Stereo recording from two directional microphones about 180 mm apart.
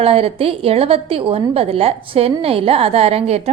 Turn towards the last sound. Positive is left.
turn(degrees=-35)  # may be behind; listen again after turning